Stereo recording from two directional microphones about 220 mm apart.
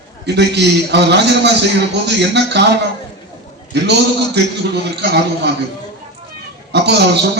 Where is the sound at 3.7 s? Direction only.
50° right (ahead or behind).